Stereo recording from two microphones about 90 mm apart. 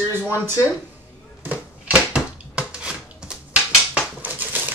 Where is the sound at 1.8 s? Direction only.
10° right (ahead or behind).